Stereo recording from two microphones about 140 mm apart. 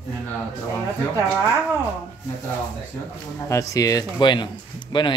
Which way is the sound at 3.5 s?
25° left (ahead or behind).